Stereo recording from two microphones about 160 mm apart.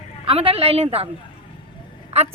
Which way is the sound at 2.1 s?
40° right (ahead or behind).